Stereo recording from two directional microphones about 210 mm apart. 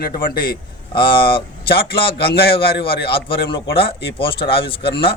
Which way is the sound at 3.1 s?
25° left (ahead or behind).